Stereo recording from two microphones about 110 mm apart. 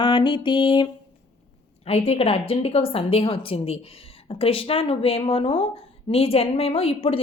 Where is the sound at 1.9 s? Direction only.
70° left (ahead or behind).